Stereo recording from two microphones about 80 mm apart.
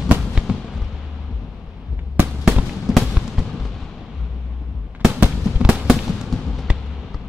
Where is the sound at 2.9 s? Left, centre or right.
Centre.